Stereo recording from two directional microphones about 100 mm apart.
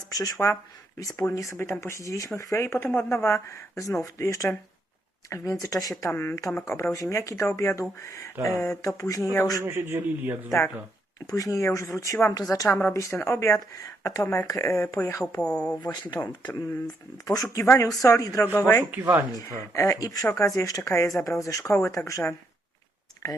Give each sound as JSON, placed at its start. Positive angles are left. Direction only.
{"t": 0.1, "sound": "speech", "side_deg": 40}
{"t": 9.6, "sound": "a man's voice", "side_deg": -25}
{"t": 11.3, "sound": "speech", "side_deg": 35}
{"t": 15.4, "sound": "speech", "side_deg": 10}
{"t": 15.8, "sound": "speech", "side_deg": 40}
{"t": 17.2, "sound": "speech", "side_deg": 35}
{"t": 18.5, "sound": "speech", "side_deg": 20}
{"t": 18.9, "sound": "speech", "side_deg": -15}
{"t": 19.5, "sound": "speech", "side_deg": 30}